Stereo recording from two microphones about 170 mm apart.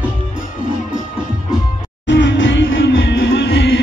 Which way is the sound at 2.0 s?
90° left.